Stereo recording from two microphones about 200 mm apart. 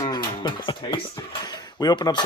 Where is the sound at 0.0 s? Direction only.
20° left (ahead or behind).